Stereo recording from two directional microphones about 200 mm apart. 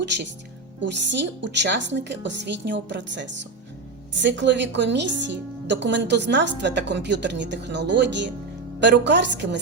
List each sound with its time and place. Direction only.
0.8 s a woman's voice: 65° right (ahead or behind)